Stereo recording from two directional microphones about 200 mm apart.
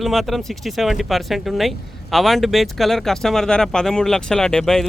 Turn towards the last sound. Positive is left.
turn(degrees=0)  # may be behind; listen again after turning